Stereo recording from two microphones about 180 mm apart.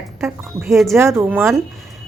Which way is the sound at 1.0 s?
15° right (ahead or behind).